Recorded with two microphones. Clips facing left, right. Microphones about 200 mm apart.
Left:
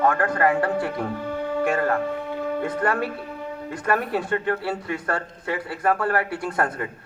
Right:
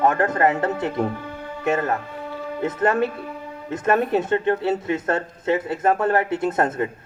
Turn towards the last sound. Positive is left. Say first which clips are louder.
# right 4 dB
turn(degrees=-25)  # may be behind; listen again after turning